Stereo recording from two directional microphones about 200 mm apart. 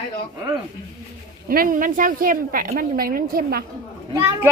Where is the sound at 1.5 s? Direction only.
45° right (ahead or behind).